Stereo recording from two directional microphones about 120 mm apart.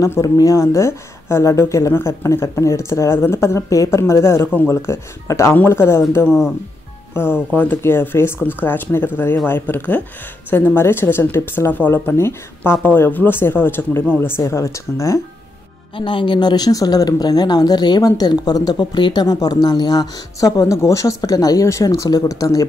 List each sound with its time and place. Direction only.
0.0 s speech: 30° left (ahead or behind)
6.2 s speech: centre (ahead or behind)
7.2 s speech: 20° left (ahead or behind)
16.0 s speech: 45° left (ahead or behind); by 22.7 s 30° left (ahead or behind)